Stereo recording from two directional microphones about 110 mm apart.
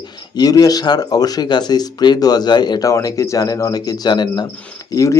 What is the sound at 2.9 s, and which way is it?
Speech, 30° left (ahead or behind).